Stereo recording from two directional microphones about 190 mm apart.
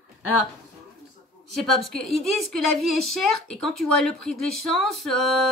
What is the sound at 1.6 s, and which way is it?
A woman's voice, centre (ahead or behind).